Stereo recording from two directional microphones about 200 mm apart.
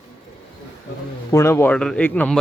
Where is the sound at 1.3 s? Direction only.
15° left (ahead or behind).